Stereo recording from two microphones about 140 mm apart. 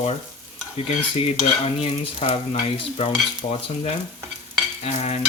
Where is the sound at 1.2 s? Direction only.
45° left (ahead or behind).